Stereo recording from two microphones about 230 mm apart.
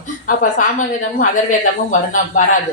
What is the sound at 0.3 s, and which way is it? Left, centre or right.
Speech, left.